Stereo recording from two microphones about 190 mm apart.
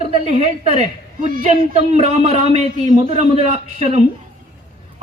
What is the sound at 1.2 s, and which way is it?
A man's voice, 45° right (ahead or behind).